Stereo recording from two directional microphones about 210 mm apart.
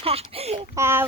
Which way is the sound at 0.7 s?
10° right (ahead or behind).